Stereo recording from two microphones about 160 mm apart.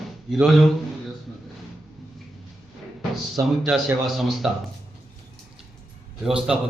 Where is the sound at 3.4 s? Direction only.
20° right (ahead or behind).